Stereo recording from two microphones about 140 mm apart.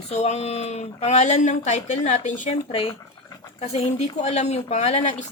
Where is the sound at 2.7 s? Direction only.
40° left (ahead or behind).